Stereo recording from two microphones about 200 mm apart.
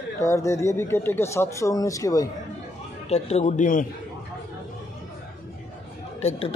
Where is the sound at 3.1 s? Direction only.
35° left (ahead or behind).